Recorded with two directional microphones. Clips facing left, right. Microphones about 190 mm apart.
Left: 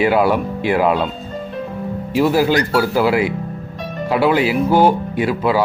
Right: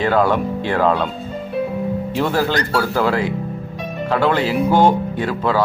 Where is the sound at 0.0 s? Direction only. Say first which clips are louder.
Left 2 dB; 10° left (ahead or behind).